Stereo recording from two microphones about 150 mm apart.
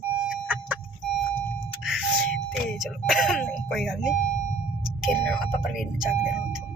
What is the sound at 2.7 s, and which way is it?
Speech, centre (ahead or behind).